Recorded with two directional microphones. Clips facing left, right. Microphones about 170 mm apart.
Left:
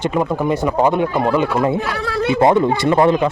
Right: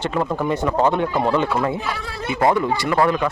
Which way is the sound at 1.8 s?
75° left (ahead or behind).